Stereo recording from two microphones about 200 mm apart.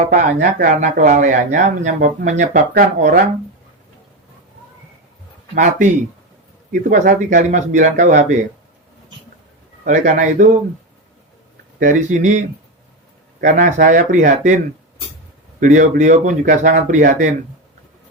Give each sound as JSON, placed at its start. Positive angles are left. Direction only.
{"t": 0.0, "sound": "speech", "side_deg": -40}
{"t": 5.5, "sound": "speech", "side_deg": -40}
{"t": 9.8, "sound": "speech", "side_deg": -40}
{"t": 11.8, "sound": "speech", "side_deg": -40}
{"t": 15.6, "sound": "speech", "side_deg": -40}